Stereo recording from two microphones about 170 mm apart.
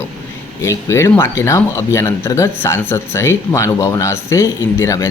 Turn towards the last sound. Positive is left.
turn(degrees=15)  # may be behind; listen again after turning